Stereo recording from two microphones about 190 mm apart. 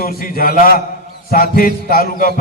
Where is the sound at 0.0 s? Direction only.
50° left (ahead or behind).